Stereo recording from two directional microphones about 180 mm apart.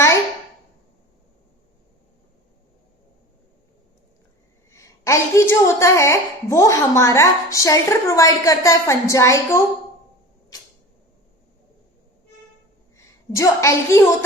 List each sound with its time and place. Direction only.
4.7 s a woman's voice: 15° left (ahead or behind)
13.3 s a woman's voice: 15° left (ahead or behind)